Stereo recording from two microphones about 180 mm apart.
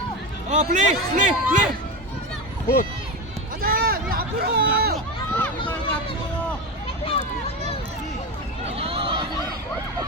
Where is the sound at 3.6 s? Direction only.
55° right (ahead or behind).